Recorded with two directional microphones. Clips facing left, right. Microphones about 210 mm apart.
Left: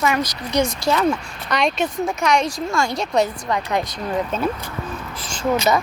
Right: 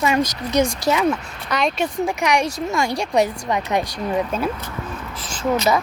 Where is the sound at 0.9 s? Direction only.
10° right (ahead or behind).